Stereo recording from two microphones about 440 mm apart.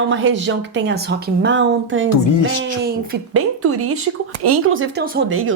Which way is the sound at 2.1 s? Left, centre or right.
Left.